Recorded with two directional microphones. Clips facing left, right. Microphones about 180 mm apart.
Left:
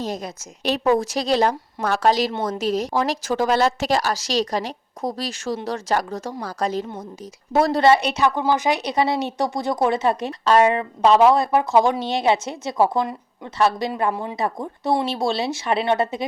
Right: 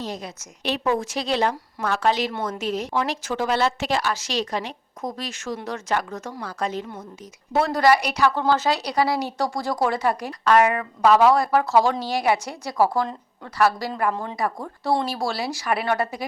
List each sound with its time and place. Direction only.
0.0 s a woman's voice: 45° left (ahead or behind); by 16.2 s 25° left (ahead or behind)